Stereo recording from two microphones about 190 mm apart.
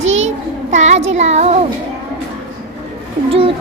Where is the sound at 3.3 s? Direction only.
30° right (ahead or behind).